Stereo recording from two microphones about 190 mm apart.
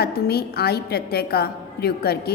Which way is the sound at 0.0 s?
55° left (ahead or behind).